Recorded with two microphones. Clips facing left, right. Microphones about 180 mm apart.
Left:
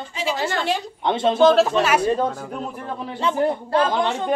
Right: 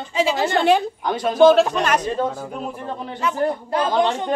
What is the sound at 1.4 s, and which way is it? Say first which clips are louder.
Speech: right 3 dB; centre (ahead or behind).